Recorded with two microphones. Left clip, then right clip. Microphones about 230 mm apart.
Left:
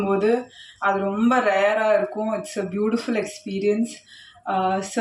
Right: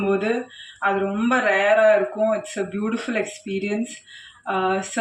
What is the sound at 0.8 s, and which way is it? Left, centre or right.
Speech, left.